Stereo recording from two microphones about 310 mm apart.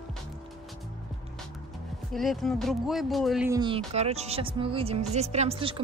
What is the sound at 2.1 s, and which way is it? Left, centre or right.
Speech, centre.